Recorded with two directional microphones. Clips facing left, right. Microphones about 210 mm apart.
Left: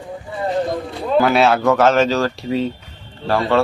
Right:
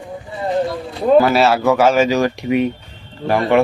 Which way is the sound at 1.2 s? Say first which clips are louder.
Even; 5° right (ahead or behind).